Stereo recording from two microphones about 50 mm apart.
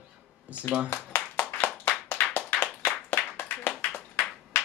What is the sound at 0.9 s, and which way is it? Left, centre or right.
Clapping, left.